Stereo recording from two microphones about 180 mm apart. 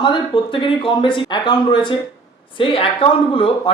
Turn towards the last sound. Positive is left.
turn(degrees=30)  # may be behind; listen again after turning